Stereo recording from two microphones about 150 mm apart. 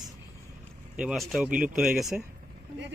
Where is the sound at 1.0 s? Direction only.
5° right (ahead or behind).